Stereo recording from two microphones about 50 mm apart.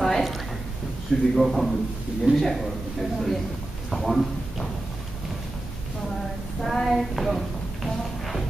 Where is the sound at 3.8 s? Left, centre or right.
Centre.